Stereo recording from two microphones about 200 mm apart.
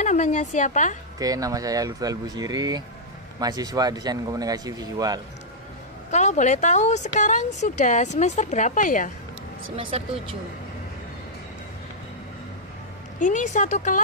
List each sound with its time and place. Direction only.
0.0 s a woman's voice: 35° left (ahead or behind)
1.2 s speech: 15° right (ahead or behind)
6.0 s a woman's voice: 35° left (ahead or behind)
9.8 s speech: 25° right (ahead or behind)
13.2 s a woman's voice: 40° left (ahead or behind)